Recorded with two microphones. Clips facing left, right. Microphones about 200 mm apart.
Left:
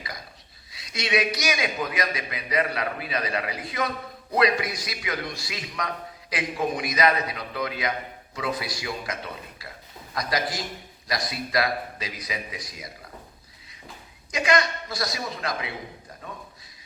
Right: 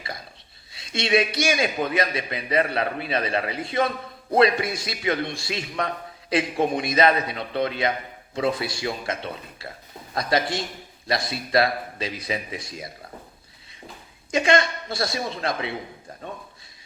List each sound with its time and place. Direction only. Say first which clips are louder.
0.7 s a man's voice: right 4 dB; 30° right (ahead or behind)
14.3 s a man's voice: right 3 dB; 30° right (ahead or behind)
16.2 s a sound: right 4 dB; 30° right (ahead or behind)